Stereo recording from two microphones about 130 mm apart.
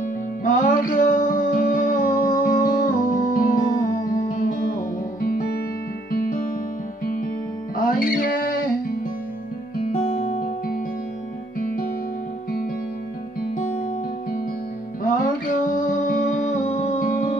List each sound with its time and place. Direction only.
0.4 s music: 80° left
7.7 s music: 90° left
9.9 s music: 65° left (ahead or behind)
11.6 s music: 90° left
15.7 s music: 80° left